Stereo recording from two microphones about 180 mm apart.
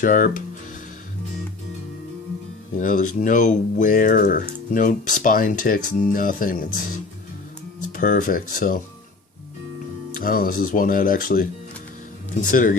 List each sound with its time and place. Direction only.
0.0 s speech: 50° left (ahead or behind)
2.7 s speech: 45° left (ahead or behind)
7.9 s speech: 50° left (ahead or behind)
10.2 s speech: 50° left (ahead or behind)